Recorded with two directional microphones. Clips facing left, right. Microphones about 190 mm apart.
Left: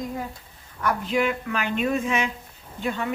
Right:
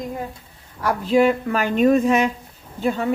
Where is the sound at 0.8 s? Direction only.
35° right (ahead or behind).